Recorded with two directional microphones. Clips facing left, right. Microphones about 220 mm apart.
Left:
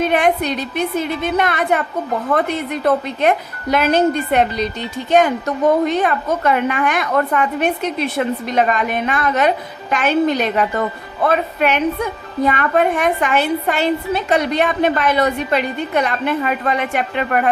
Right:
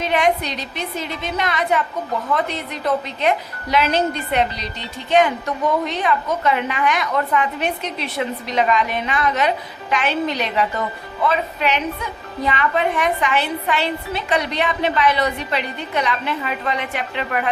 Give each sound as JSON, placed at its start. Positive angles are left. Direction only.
{"t": 0.0, "sound": "a woman's voice", "side_deg": 50}